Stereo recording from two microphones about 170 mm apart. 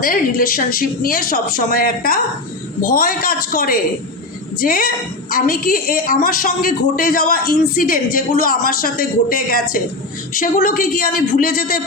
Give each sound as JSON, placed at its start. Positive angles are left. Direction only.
{"t": 0.0, "sound": "a woman's voice", "side_deg": 55}